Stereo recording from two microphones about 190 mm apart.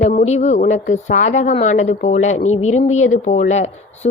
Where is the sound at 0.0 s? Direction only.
40° left (ahead or behind).